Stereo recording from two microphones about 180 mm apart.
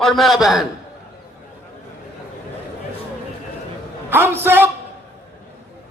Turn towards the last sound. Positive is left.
turn(degrees=-10)  # may be behind; listen again after turning